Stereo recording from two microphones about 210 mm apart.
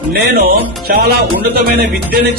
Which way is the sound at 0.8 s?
45° right (ahead or behind).